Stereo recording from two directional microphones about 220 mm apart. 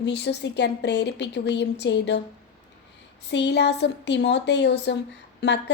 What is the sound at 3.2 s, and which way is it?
A woman's voice, 50° left (ahead or behind).